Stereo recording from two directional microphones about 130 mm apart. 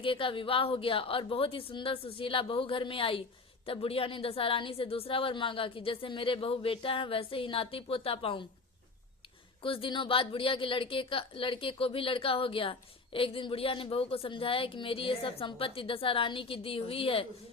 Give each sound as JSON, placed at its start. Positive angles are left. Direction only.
{"t": 0.0, "sound": "a woman's voice", "side_deg": 40}
{"t": 9.6, "sound": "a woman's voice", "side_deg": 45}